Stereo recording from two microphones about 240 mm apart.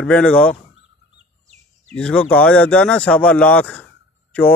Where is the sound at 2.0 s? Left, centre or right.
Centre.